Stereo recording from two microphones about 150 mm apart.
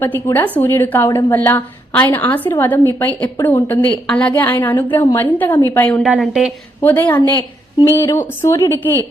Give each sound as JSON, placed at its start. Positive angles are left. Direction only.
{"t": 0.0, "sound": "a woman's voice", "side_deg": 15}
{"t": 6.0, "sound": "a woman's voice", "side_deg": 0}
{"t": 6.8, "sound": "a woman's voice", "side_deg": 10}
{"t": 7.3, "sound": "a woman's voice", "side_deg": 25}